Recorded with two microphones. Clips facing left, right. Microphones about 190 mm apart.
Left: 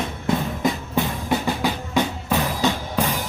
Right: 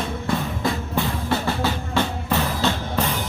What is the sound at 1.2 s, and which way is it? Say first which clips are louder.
Music: left 1 dB; 15° left (ahead or behind).